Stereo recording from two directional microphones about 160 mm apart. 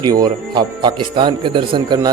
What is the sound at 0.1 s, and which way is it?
A man's voice, 25° right (ahead or behind).